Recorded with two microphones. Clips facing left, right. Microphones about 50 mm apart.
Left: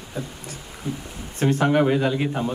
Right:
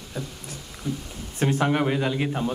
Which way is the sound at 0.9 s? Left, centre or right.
Left.